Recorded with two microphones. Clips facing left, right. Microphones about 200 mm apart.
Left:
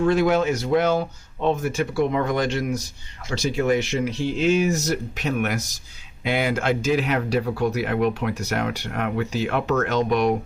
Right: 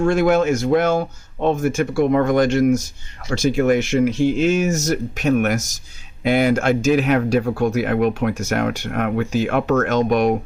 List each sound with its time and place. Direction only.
0.0 s speech: 50° right (ahead or behind)